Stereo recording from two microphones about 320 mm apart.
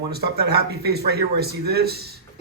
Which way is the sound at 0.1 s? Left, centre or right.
Right.